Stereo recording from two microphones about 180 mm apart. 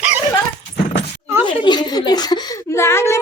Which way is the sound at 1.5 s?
25° left (ahead or behind).